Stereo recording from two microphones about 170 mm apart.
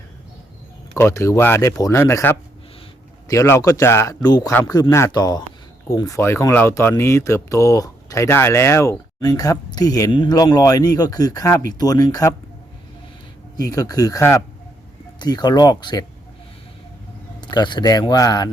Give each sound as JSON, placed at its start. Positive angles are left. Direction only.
{"t": 0.9, "sound": "speech", "side_deg": 15}
{"t": 13.6, "sound": "speech", "side_deg": 20}
{"t": 17.5, "sound": "speech", "side_deg": 25}